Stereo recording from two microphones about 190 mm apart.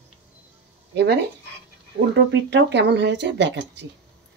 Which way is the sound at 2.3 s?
70° right (ahead or behind).